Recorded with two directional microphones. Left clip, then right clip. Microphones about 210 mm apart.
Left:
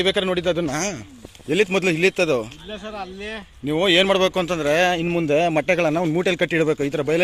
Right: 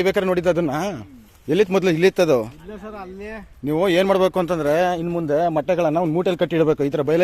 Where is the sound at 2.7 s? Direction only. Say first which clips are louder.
Left 3 dB; 5° right (ahead or behind).